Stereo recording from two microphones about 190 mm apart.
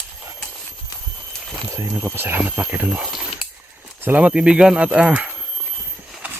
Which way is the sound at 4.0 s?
10° right (ahead or behind).